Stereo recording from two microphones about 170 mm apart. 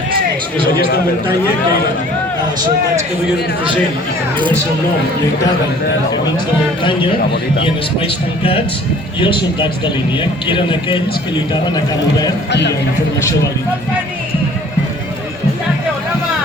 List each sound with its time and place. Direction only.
7.6 s a man's voice: 30° left (ahead or behind)
12.5 s speech: 90° left